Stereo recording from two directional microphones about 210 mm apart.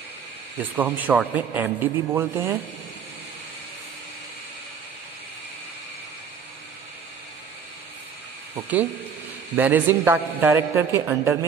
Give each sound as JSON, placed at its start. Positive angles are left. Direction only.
{"t": 0.6, "sound": "a man's voice", "side_deg": -10}
{"t": 8.5, "sound": "a man's voice", "side_deg": -5}